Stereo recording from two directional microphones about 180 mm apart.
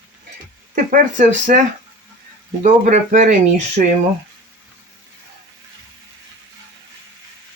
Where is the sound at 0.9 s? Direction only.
45° right (ahead or behind).